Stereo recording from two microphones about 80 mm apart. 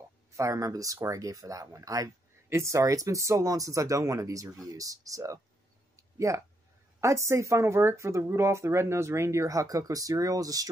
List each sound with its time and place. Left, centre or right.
0.4 s speech: right
5.9 s a sound: right
7.0 s speech: right